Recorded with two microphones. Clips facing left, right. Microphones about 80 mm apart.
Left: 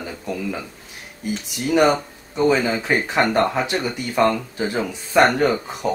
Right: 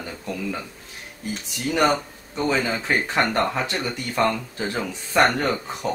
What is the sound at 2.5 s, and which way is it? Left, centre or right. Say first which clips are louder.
Speech: left 2 dB; centre.